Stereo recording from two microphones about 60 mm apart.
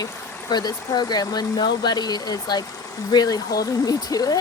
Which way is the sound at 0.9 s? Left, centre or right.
Left.